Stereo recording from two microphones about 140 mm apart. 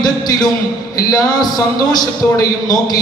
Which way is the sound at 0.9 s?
30° left (ahead or behind).